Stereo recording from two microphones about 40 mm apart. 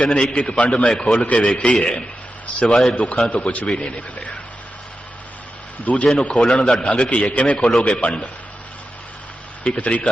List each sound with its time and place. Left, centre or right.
0.0 s a man's voice: left
0.9 s a man's voice: left
1.7 s a man's voice: centre
2.9 s a man's voice: left
5.8 s a man's voice: left
9.7 s a man's voice: left